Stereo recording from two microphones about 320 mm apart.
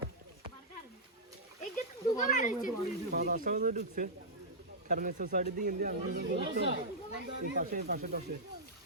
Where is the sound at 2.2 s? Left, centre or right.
Left.